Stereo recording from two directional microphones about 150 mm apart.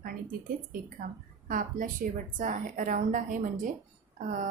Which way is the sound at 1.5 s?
65° right (ahead or behind).